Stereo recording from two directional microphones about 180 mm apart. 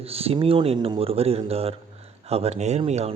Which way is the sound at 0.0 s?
35° right (ahead or behind).